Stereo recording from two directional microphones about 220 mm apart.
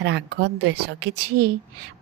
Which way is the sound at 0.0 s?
55° right (ahead or behind).